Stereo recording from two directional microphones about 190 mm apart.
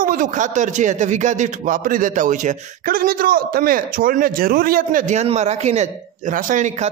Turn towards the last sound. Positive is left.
turn(degrees=-40)  # may be behind; listen again after turning